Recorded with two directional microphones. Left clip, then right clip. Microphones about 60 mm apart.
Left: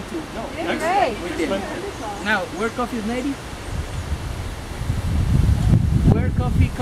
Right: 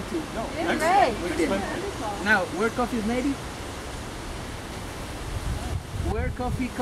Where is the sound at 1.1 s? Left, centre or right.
Centre.